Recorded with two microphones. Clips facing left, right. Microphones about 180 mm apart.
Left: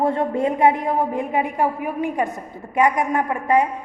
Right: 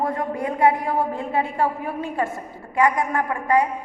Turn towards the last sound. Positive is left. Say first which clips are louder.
# left 2 dB
turn(degrees=20)  # may be behind; listen again after turning